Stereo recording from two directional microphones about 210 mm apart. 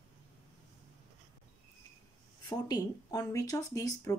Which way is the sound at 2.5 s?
15° left (ahead or behind).